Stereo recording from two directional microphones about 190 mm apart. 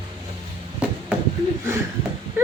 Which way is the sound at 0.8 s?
5° right (ahead or behind).